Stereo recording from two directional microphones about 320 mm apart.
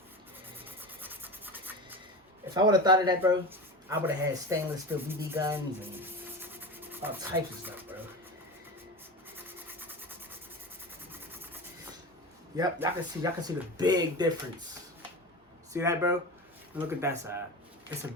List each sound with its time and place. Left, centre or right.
0.6 s rub: centre
2.6 s speech: centre
9.5 s rub: centre
12.5 s speech: centre
15.7 s speech: centre